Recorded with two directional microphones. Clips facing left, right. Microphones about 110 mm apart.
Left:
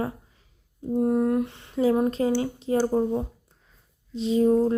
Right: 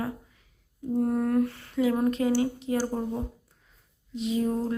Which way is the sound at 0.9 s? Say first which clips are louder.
Left 2 dB; 20° left (ahead or behind).